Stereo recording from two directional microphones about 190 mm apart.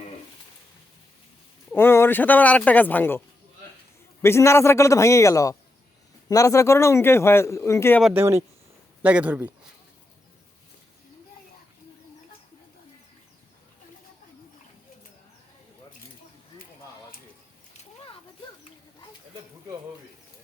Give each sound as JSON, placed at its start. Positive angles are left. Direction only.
{"t": 1.7, "sound": "a man's voice", "side_deg": 10}
{"t": 4.2, "sound": "a man's voice", "side_deg": 15}
{"t": 8.0, "sound": "a man's voice", "side_deg": -10}
{"t": 17.7, "sound": "a sound", "side_deg": 30}